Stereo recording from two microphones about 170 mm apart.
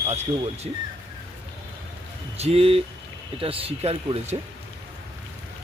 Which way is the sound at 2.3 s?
35° right (ahead or behind).